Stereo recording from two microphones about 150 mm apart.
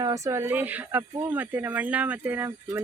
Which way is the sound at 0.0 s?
20° right (ahead or behind).